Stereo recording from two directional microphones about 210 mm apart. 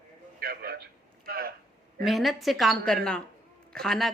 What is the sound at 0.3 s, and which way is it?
Radio, 45° right (ahead or behind).